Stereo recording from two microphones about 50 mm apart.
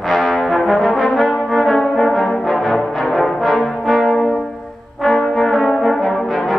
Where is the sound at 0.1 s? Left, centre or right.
Centre.